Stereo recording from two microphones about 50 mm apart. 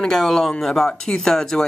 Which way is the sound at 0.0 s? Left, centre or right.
Centre.